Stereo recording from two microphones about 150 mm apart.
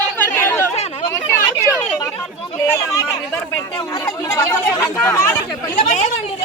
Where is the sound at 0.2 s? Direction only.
15° left (ahead or behind).